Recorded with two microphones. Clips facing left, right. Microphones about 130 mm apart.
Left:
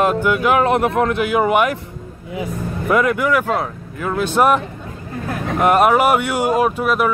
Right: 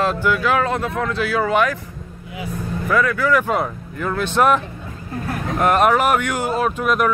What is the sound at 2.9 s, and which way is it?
Speech, 20° left (ahead or behind).